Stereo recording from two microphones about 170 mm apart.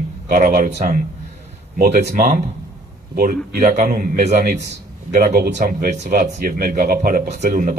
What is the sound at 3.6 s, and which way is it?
Speech, 40° right (ahead or behind).